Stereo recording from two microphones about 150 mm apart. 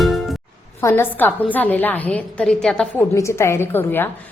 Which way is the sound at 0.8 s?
15° left (ahead or behind).